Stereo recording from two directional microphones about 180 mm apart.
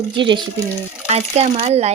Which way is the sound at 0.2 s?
25° right (ahead or behind).